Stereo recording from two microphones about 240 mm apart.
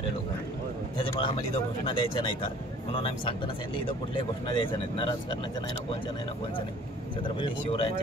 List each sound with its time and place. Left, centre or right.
0.9 s speech: left
7.3 s speech: left